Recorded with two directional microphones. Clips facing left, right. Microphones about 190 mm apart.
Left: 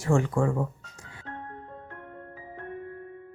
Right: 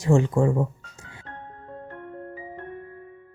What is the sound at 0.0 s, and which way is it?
Speech, 20° right (ahead or behind).